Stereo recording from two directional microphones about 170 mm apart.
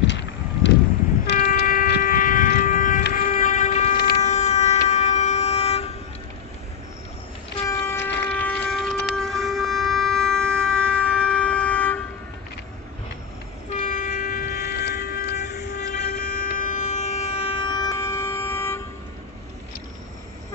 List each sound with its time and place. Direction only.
0.0 s vehicle: 90° left
1.5 s a sound: 55° left (ahead or behind)
3.1 s train: 50° left (ahead or behind)
4.2 s vehicle: 40° left (ahead or behind)
7.6 s train: 15° left (ahead or behind)
8.3 s a sound: 5° left (ahead or behind)
13.7 s train: 50° left (ahead or behind); by 18.8 s 15° left (ahead or behind)